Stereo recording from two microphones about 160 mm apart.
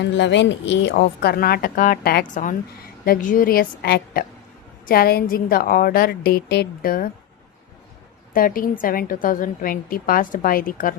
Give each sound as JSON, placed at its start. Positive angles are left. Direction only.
{"t": 0.0, "sound": "a woman's voice", "side_deg": 90}
{"t": 8.3, "sound": "a woman's voice", "side_deg": 60}